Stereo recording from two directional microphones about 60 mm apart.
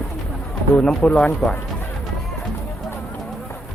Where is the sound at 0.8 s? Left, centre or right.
Centre.